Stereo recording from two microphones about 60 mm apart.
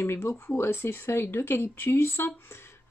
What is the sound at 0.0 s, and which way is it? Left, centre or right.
Speech, left.